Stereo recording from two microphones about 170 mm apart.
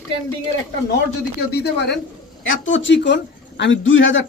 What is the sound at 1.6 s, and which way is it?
A man's voice, 80° left.